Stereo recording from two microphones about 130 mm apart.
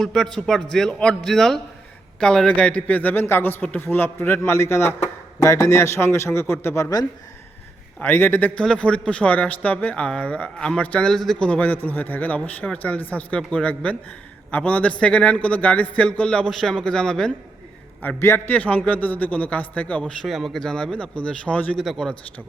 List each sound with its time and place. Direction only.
0.0 s a man's voice: 5° left (ahead or behind)
7.9 s a man's voice: 15° left (ahead or behind)
18.0 s a man's voice: 15° left (ahead or behind)
20.2 s a man's voice: centre (ahead or behind)